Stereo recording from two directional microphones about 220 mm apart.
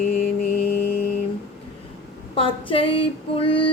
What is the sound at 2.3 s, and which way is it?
Female singing, 25° left (ahead or behind).